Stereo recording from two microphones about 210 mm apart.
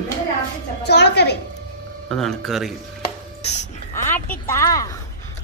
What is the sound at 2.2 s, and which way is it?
Speech, centre (ahead or behind).